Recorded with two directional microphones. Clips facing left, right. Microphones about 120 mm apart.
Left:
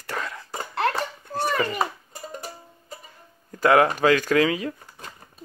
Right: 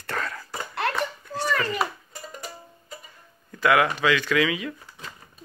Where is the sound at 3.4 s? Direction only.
35° left (ahead or behind).